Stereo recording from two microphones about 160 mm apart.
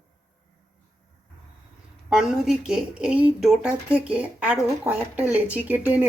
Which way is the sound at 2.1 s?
5° right (ahead or behind).